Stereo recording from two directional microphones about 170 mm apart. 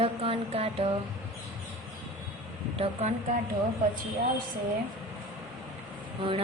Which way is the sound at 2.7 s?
35° right (ahead or behind).